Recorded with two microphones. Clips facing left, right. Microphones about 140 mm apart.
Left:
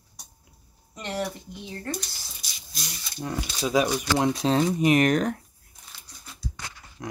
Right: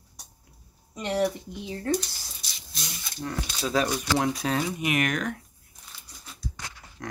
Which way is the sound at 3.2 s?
15° left (ahead or behind).